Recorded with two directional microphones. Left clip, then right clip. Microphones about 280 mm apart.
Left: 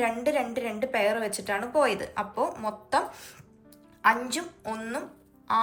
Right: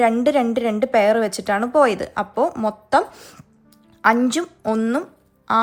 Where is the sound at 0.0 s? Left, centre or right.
Right.